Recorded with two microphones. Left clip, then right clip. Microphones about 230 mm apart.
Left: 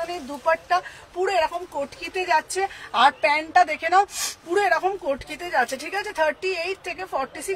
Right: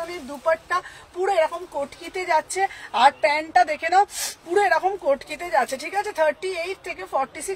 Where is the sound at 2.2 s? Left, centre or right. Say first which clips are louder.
Right 1 dB; centre.